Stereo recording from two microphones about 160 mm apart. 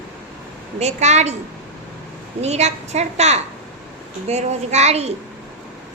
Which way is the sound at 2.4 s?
45° right (ahead or behind).